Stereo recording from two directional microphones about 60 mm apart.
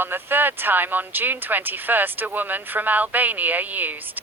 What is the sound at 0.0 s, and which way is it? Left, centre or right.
Speech, right.